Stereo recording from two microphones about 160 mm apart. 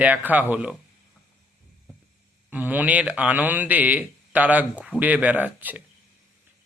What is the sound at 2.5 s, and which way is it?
Speech, 10° right (ahead or behind).